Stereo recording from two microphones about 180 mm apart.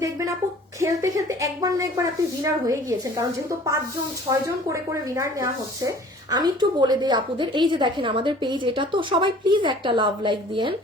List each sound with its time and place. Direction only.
0.8 s a woman's voice: 20° right (ahead or behind)
4.3 s a woman's voice: 15° right (ahead or behind)